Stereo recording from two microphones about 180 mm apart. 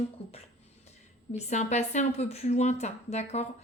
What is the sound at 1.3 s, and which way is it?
Speech, 40° left (ahead or behind).